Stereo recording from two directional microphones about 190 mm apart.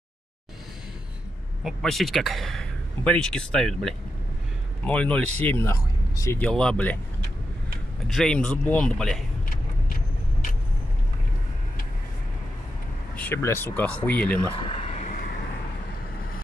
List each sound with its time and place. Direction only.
1.6 s a man's voice: centre (ahead or behind)
8.1 s a man's voice: centre (ahead or behind)
13.1 s speech: 10° left (ahead or behind)
14.5 s vehicle: 30° left (ahead or behind); by 15.3 s 45° left (ahead or behind)